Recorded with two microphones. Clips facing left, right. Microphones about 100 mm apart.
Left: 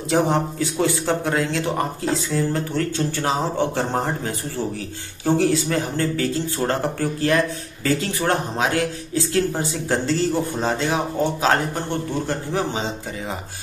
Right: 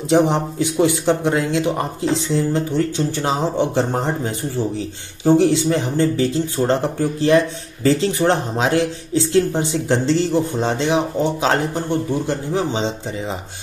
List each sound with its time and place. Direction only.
0.1 s speech: 20° right (ahead or behind)